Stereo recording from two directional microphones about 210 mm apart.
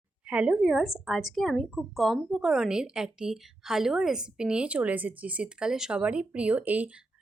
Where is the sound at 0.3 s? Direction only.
5° right (ahead or behind).